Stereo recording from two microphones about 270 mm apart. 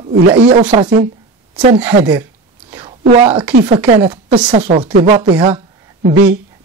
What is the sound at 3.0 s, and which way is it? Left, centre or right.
A woman's voice, right.